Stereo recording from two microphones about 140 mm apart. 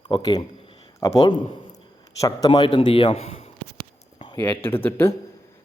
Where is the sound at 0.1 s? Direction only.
30° left (ahead or behind).